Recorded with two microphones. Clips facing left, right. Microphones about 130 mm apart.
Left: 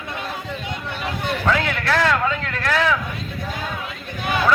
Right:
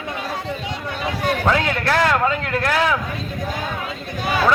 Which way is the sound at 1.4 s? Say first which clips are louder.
Even; 25° right (ahead or behind).